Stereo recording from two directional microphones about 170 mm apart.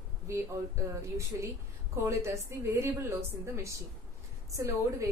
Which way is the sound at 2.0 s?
15° right (ahead or behind).